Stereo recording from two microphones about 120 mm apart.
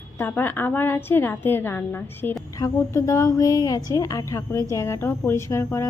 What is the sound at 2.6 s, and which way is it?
A woman's voice, 25° left (ahead or behind).